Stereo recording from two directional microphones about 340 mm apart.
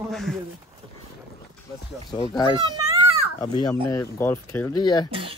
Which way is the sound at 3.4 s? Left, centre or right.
Centre.